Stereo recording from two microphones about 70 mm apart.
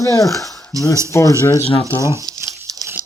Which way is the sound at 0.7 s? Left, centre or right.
Right.